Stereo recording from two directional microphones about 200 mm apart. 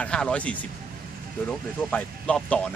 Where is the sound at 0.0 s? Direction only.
5° left (ahead or behind).